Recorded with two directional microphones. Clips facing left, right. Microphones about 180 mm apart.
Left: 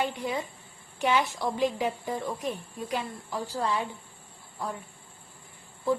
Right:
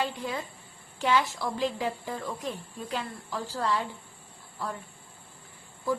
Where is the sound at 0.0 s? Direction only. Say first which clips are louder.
Left 2 dB; 20° left (ahead or behind).